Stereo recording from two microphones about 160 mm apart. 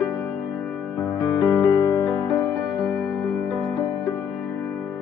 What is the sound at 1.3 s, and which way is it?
Music, 20° left (ahead or behind).